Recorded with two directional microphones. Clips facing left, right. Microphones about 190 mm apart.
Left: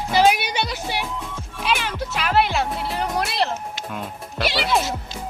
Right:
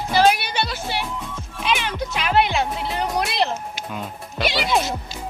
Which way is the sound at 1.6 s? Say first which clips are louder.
Right 1 dB; 5° left (ahead or behind).